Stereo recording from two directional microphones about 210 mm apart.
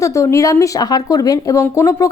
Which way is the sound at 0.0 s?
15° left (ahead or behind).